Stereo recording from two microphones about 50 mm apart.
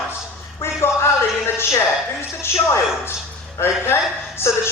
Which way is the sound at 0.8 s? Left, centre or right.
Left.